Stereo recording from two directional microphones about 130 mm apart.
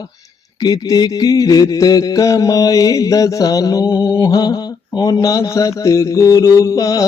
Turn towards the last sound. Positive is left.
turn(degrees=25)  # may be behind; listen again after turning